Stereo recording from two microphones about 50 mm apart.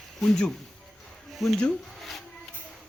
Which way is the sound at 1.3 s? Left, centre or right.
Centre.